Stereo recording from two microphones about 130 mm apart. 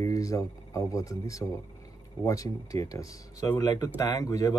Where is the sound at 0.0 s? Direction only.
25° left (ahead or behind).